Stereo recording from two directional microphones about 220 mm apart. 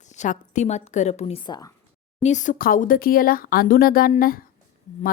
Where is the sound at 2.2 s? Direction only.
35° left (ahead or behind).